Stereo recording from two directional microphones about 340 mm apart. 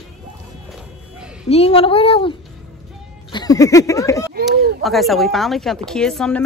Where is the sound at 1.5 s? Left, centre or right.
Centre.